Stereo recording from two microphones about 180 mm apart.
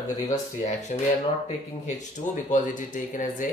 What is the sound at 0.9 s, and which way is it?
Speech, 45° left (ahead or behind).